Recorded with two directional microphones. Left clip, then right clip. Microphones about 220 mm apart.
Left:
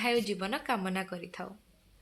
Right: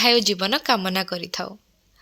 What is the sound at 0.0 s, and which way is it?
A woman's voice, 40° right (ahead or behind).